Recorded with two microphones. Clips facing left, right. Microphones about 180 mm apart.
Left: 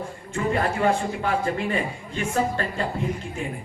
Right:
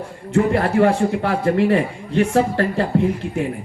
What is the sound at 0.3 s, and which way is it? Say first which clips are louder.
A man's voice: right 8 dB; 70° right (ahead or behind).